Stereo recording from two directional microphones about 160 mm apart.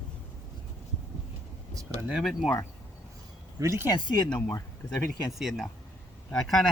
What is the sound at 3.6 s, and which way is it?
Speech, 15° right (ahead or behind).